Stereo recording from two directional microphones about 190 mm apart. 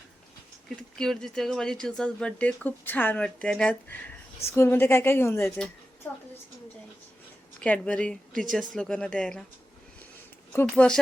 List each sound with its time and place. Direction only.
0.8 s a woman's voice: 5° left (ahead or behind)
7.6 s speech: 5° left (ahead or behind)
10.5 s a woman's voice: 10° left (ahead or behind)